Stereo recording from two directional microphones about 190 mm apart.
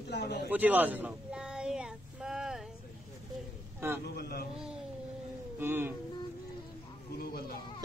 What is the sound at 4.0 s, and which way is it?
Speech, 55° left (ahead or behind).